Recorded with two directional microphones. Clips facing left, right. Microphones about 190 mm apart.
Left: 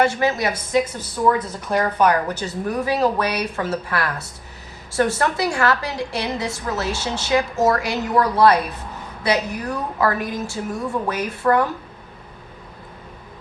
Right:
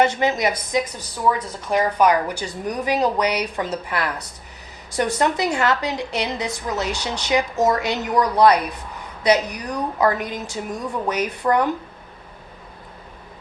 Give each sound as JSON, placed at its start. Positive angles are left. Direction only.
{"t": 0.0, "sound": "a woman's voice", "side_deg": -20}